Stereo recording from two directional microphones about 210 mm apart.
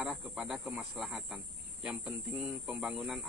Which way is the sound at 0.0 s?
Centre (ahead or behind).